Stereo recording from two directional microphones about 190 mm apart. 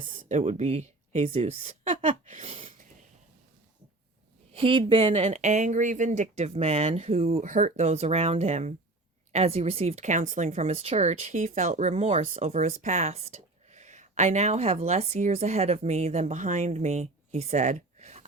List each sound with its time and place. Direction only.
0.1 s a woman's voice: 40° right (ahead or behind)
4.5 s speech: 30° right (ahead or behind)
12.5 s speech: 45° right (ahead or behind)